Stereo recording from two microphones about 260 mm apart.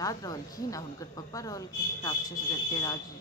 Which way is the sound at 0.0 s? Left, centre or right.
Centre.